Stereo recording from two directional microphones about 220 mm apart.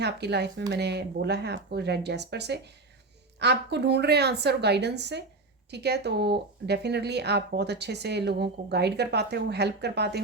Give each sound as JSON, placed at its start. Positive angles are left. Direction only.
{"t": 0.0, "sound": "speech", "side_deg": -50}